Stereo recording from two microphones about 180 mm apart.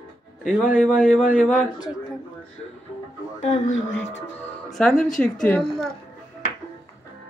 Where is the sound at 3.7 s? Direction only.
90° left.